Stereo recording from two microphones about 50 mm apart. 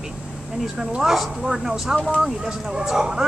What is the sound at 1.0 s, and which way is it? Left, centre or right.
A woman's voice, centre.